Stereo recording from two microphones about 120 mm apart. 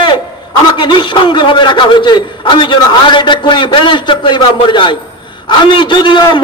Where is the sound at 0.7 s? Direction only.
40° left (ahead or behind).